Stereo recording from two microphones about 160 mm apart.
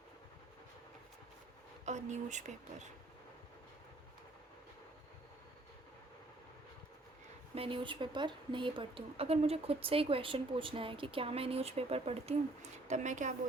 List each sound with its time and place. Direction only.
1.8 s speech: 45° right (ahead or behind)
7.5 s speech: 35° right (ahead or behind)